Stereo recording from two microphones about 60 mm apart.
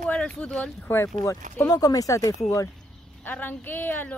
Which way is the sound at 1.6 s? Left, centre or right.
Left.